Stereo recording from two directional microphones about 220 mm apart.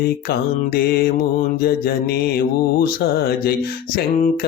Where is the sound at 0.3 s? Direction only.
45° left (ahead or behind).